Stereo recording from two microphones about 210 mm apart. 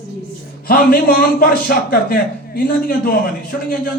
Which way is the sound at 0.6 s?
45° left (ahead or behind).